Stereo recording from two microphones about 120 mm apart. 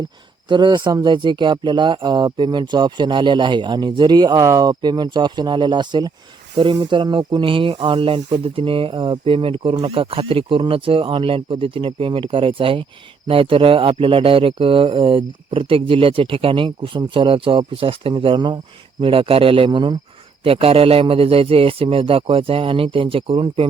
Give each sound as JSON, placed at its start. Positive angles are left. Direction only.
{"t": 0.4, "sound": "speech", "side_deg": -40}
{"t": 20.4, "sound": "speech", "side_deg": -50}